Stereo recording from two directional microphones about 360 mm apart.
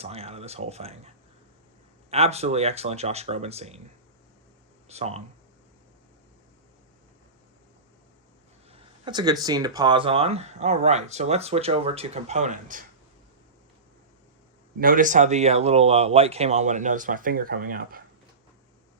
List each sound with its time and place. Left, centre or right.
0.0 s speech: centre
4.9 s speech: centre
8.7 s speech: centre
14.8 s speech: right